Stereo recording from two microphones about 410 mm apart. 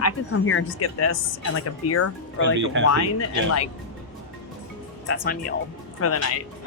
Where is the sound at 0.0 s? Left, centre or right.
Left.